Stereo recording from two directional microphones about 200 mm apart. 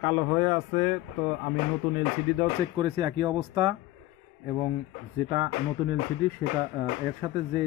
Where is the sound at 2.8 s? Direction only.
25° right (ahead or behind).